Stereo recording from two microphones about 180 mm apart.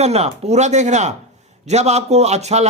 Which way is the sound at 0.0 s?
35° right (ahead or behind).